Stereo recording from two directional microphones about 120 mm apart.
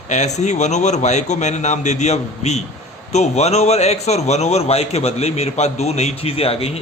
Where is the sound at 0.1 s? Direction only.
75° left (ahead or behind).